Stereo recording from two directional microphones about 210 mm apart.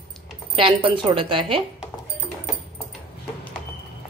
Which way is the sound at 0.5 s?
25° right (ahead or behind).